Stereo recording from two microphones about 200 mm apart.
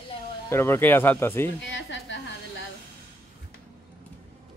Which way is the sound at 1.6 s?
65° left (ahead or behind).